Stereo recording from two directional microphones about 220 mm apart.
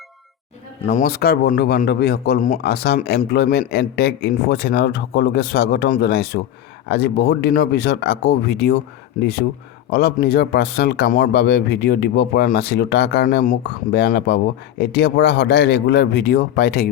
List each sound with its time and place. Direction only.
0.9 s speech: 40° left (ahead or behind)
9.9 s speech: 50° left (ahead or behind)